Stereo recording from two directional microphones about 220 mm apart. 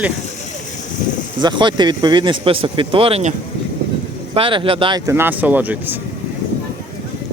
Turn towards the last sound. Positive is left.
turn(degrees=-10)  # may be behind; listen again after turning